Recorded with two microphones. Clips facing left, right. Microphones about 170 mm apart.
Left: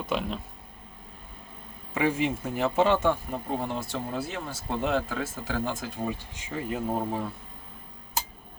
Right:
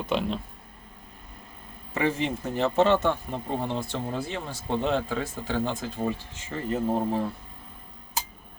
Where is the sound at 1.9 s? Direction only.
10° left (ahead or behind).